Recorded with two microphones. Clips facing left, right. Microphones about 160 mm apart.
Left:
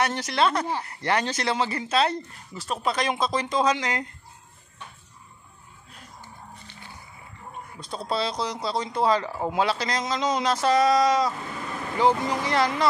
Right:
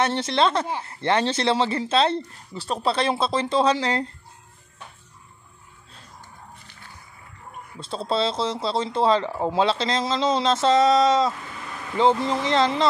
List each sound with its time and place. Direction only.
0.0 s speech: 25° right (ahead or behind)
7.8 s speech: 25° right (ahead or behind)